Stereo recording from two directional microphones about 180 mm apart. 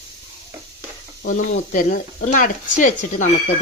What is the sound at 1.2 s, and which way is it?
Speech, 45° left (ahead or behind).